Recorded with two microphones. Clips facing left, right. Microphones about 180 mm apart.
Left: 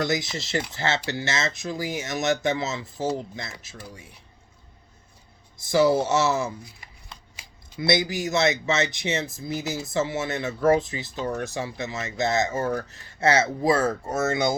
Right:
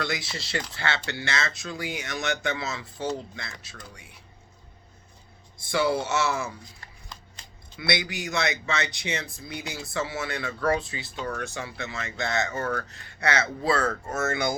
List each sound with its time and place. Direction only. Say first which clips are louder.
0.0 s speech: left 5 dB; 20° left (ahead or behind)
5.7 s speech: left 5 dB; 25° left (ahead or behind)
7.4 s a sound: even; 5° left (ahead or behind)
8.0 s speech: left 6 dB; 25° left (ahead or behind)